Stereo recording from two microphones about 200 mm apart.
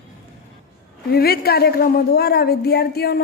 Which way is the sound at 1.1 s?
50° left (ahead or behind).